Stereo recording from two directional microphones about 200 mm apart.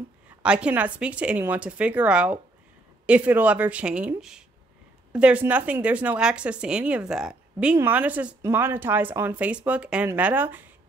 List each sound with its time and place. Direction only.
0.4 s speech: 5° right (ahead or behind)